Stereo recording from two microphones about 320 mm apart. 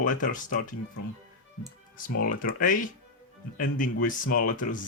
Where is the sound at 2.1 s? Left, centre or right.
Left.